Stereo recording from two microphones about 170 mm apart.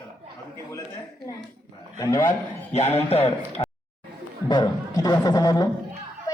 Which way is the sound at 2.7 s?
40° left (ahead or behind).